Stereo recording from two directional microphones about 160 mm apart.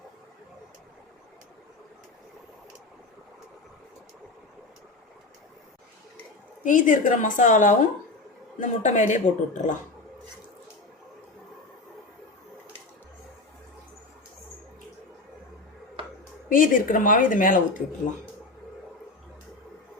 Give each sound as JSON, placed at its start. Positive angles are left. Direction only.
{"t": 6.6, "sound": "a woman's voice", "side_deg": 55}
{"t": 16.5, "sound": "speech", "side_deg": 60}